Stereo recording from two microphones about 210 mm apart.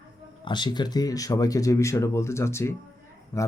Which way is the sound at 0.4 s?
20° left (ahead or behind).